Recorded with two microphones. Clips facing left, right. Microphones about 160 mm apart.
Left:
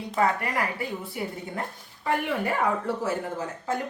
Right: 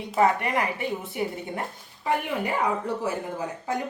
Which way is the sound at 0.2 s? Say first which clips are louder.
Right 3 dB; 20° right (ahead or behind).